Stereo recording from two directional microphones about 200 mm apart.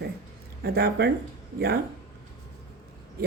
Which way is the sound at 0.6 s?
55° right (ahead or behind).